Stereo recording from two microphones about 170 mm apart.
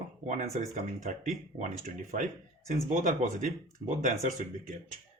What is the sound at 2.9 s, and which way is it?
Speech, 50° right (ahead or behind).